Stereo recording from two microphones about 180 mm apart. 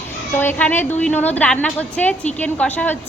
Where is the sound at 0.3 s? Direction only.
10° left (ahead or behind).